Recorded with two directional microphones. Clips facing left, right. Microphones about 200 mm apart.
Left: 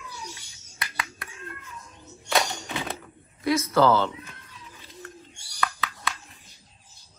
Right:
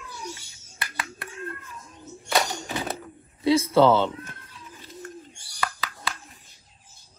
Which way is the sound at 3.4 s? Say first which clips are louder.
Right 3 dB; 25° right (ahead or behind).